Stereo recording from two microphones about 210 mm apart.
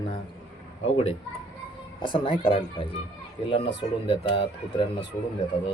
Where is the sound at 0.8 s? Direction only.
25° left (ahead or behind).